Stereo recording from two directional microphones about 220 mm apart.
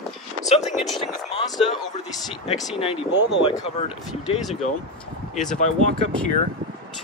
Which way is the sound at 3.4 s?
25° left (ahead or behind).